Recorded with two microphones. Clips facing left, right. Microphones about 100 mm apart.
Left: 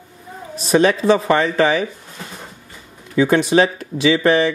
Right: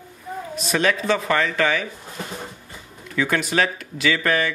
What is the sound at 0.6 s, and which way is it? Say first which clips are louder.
Speech: left 7 dB; 30° left (ahead or behind).